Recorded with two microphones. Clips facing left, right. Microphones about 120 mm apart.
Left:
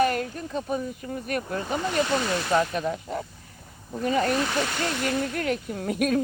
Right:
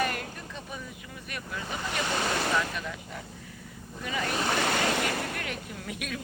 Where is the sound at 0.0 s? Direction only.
40° left (ahead or behind).